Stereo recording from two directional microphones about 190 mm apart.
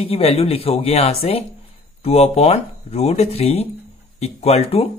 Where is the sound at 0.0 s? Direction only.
30° left (ahead or behind).